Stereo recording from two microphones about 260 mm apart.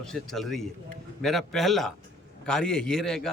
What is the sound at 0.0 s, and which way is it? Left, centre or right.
A man's voice, centre.